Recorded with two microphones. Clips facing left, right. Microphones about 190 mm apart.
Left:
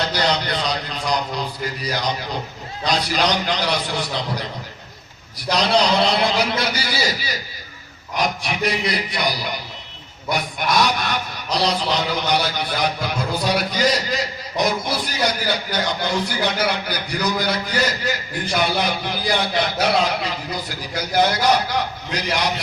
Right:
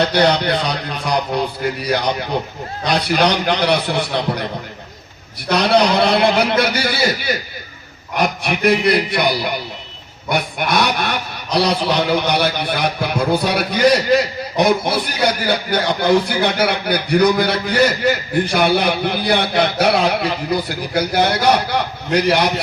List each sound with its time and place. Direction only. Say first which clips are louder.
0.0 s a man's voice: right 7 dB; 60° right (ahead or behind)
5.5 s a man's voice: right 4 dB; 60° right (ahead or behind)